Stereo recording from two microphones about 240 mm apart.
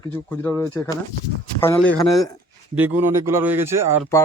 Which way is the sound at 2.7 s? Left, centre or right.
Centre.